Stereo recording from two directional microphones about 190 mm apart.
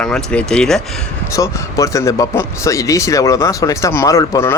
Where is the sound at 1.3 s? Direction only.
15° left (ahead or behind).